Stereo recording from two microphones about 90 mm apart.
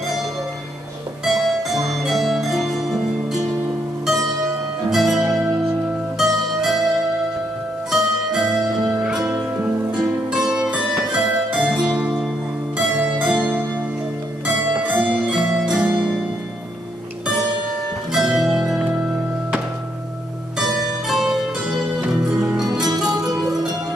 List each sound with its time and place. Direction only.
1.2 s music: 5° right (ahead or behind)
4.8 s music: centre (ahead or behind)
7.9 s music: 5° right (ahead or behind)
10.3 s music: 5° right (ahead or behind)
14.8 s music: 15° right (ahead or behind)
18.1 s music: 5° right (ahead or behind)
21.1 s music: 5° right (ahead or behind)
22.8 s music: 45° right (ahead or behind)
23.2 s music: 5° right (ahead or behind)